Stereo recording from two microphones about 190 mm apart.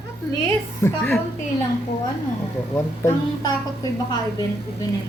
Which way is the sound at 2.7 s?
15° left (ahead or behind).